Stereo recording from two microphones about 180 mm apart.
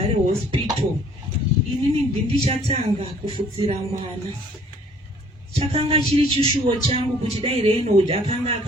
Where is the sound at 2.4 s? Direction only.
35° right (ahead or behind).